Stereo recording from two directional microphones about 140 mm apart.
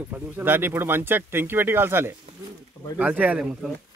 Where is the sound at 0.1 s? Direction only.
15° right (ahead or behind).